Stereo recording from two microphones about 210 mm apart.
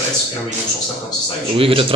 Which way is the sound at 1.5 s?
25° right (ahead or behind).